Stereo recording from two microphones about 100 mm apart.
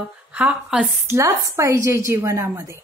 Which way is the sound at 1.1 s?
30° right (ahead or behind).